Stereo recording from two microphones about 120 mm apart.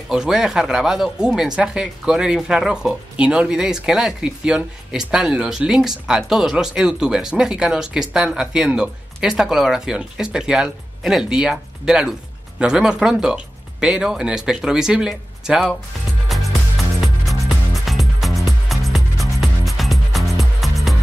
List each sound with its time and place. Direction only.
0.1 s speech: 5° right (ahead or behind)
16.3 s music: centre (ahead or behind)